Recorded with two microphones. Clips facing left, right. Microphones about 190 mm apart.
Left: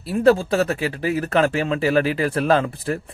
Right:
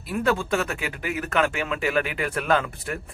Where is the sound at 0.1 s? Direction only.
35° left (ahead or behind).